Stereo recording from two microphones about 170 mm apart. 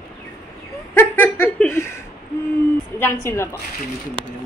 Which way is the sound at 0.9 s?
15° left (ahead or behind).